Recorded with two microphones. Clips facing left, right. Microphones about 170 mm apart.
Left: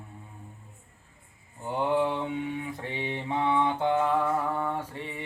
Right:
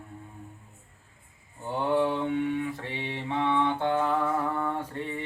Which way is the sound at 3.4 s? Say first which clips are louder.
Even; 10° left (ahead or behind).